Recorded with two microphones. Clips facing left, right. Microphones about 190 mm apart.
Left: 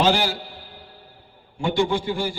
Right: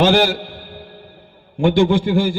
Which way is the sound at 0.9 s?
70° right (ahead or behind).